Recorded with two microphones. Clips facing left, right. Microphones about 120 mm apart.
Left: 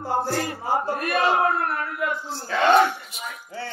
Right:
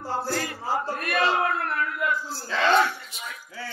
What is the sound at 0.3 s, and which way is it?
Speech, 30° left (ahead or behind).